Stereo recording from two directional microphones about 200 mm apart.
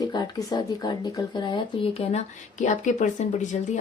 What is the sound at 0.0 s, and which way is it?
Speech, 20° left (ahead or behind).